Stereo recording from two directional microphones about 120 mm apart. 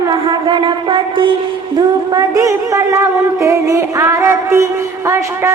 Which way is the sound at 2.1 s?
30° right (ahead or behind).